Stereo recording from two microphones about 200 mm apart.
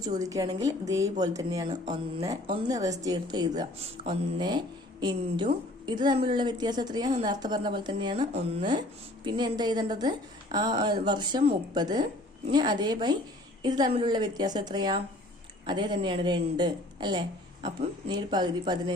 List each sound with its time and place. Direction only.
0.0 s a woman's voice: 20° right (ahead or behind)